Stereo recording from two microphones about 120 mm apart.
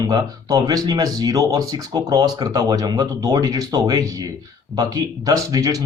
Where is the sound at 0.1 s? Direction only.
35° right (ahead or behind).